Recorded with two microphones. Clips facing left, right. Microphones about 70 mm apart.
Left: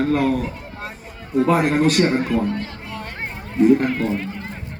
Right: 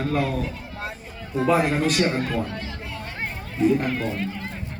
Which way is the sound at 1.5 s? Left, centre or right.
Left.